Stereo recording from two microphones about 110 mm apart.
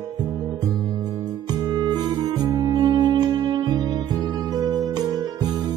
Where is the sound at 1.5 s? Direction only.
35° right (ahead or behind).